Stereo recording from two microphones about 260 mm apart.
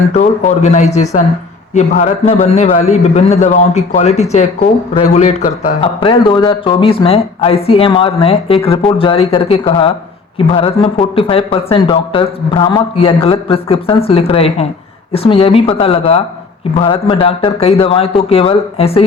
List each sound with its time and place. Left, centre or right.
0.1 s a man's voice: left